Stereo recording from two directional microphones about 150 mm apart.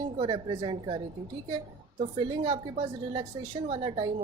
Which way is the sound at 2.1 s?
35° right (ahead or behind).